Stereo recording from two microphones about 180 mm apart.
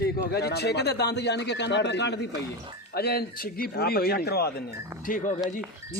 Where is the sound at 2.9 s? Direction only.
60° left (ahead or behind).